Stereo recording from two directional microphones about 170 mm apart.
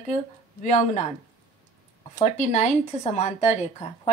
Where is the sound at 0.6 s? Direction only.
45° left (ahead or behind).